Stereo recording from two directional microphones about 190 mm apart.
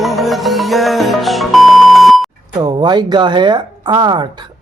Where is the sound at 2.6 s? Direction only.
20° right (ahead or behind).